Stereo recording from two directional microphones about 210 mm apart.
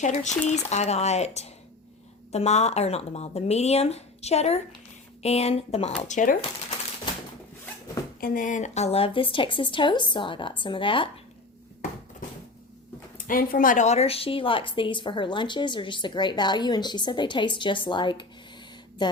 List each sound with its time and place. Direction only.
0.0 s a woman's voice: 35° left (ahead or behind)
8.2 s a woman's voice: 40° left (ahead or behind); by 11.1 s 25° left (ahead or behind)
13.1 s a woman's voice: 40° left (ahead or behind); by 18.3 s 20° left (ahead or behind)